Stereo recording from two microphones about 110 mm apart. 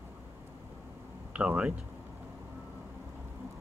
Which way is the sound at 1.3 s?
10° right (ahead or behind).